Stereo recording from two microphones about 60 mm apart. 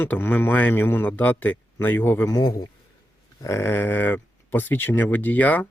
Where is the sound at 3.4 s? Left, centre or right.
Left.